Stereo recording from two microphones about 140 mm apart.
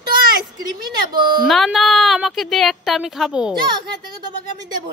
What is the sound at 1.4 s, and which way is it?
A woman's voice, centre (ahead or behind).